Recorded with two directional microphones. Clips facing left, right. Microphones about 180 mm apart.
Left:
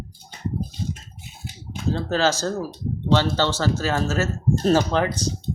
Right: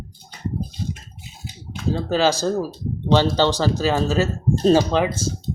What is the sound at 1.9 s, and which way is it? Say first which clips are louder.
Speech: right 2 dB; 15° right (ahead or behind).